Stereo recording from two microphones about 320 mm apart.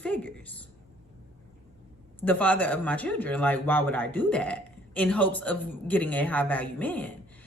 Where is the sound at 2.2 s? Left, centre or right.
Centre.